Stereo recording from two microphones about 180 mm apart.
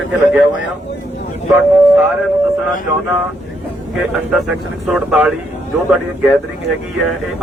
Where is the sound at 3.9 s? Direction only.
Centre (ahead or behind).